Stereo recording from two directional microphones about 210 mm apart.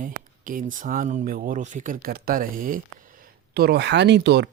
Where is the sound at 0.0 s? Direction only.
40° right (ahead or behind).